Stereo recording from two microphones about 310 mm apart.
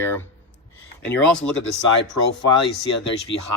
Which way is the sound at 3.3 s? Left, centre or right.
Left.